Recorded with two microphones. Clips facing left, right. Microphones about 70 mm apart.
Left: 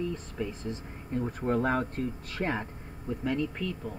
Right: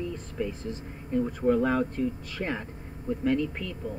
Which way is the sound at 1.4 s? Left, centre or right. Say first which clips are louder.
Right 3 dB; left.